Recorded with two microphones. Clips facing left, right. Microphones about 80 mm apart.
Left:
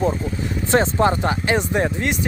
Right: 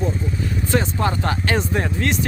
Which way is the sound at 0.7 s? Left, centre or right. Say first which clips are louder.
Left 5 dB; left.